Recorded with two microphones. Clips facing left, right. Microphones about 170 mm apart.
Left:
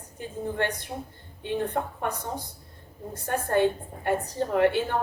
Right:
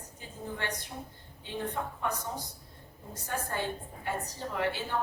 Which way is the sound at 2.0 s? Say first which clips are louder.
Left 3 dB; 55° left (ahead or behind).